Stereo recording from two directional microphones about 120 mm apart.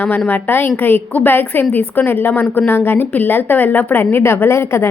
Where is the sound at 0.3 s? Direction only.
15° left (ahead or behind).